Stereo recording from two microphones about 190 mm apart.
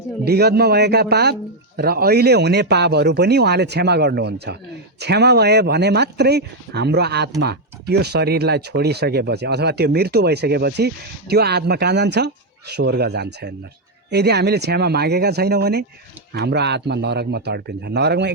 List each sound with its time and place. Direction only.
0.3 s speech: 55° right (ahead or behind)